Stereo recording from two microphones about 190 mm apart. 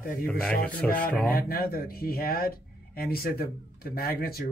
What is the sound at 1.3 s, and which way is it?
Speech, 50° left (ahead or behind).